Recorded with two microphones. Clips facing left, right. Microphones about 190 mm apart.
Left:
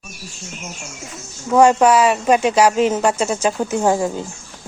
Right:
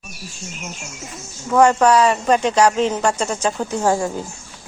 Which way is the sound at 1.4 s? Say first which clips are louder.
Left 2 dB; 15° left (ahead or behind).